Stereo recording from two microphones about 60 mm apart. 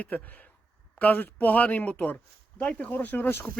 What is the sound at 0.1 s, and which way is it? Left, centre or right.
Speech, left.